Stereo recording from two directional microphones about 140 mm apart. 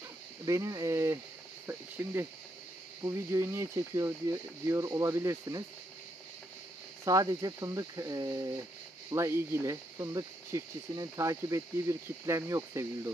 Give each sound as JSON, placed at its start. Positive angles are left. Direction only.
{"t": 0.5, "sound": "speech", "side_deg": -25}
{"t": 7.1, "sound": "speech", "side_deg": -25}